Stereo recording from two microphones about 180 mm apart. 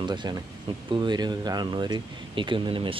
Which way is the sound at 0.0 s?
25° right (ahead or behind).